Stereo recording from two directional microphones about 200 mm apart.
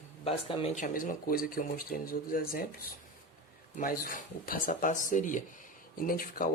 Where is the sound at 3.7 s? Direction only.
45° left (ahead or behind).